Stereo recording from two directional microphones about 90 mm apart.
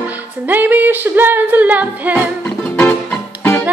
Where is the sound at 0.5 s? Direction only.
20° right (ahead or behind).